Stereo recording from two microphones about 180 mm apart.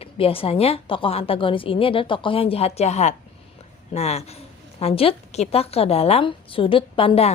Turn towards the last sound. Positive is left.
turn(degrees=30)  # may be behind; listen again after turning